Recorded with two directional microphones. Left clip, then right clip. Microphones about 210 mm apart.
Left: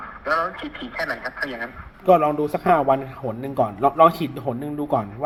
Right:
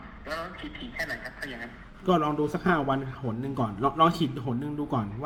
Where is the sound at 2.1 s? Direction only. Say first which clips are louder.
Left 9 dB; 10° right (ahead or behind).